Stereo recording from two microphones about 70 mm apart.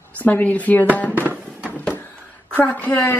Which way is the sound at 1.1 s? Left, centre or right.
Right.